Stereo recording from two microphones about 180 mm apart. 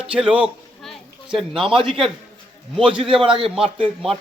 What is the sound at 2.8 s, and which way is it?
Speech, 30° right (ahead or behind).